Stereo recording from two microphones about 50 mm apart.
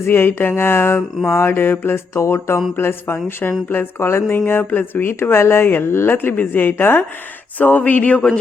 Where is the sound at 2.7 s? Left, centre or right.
Left.